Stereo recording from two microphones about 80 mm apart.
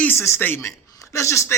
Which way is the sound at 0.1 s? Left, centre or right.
Left.